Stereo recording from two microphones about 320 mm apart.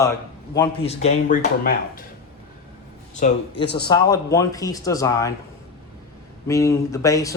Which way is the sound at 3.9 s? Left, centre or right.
Centre.